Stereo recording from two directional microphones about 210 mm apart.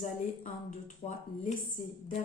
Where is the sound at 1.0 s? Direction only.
20° left (ahead or behind).